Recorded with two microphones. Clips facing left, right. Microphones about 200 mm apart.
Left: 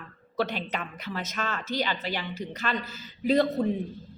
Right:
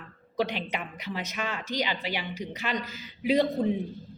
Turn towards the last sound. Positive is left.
turn(degrees=-15)  # may be behind; listen again after turning